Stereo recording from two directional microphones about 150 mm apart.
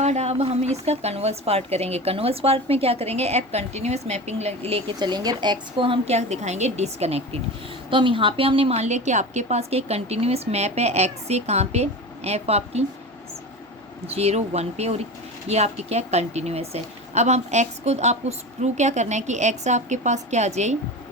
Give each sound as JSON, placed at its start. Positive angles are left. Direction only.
{"t": 0.0, "sound": "speech", "side_deg": -45}
{"t": 7.9, "sound": "speech", "side_deg": -35}
{"t": 14.1, "sound": "speech", "side_deg": -45}